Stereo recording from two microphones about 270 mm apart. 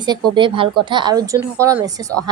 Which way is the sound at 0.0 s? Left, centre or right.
Centre.